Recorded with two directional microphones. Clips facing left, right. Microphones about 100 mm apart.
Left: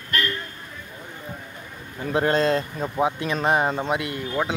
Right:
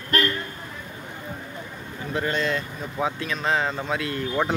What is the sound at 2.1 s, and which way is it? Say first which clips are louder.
Speech: left 5 dB; 40° left (ahead or behind).